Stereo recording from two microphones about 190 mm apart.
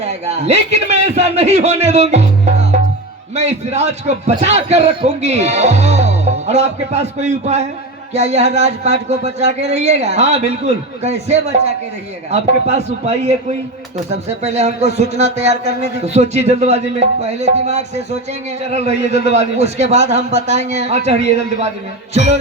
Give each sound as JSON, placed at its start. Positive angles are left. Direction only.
{"t": 0.0, "sound": "a man's voice", "side_deg": -35}